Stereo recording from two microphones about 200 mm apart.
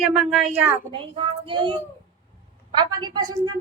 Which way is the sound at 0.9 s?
25° right (ahead or behind).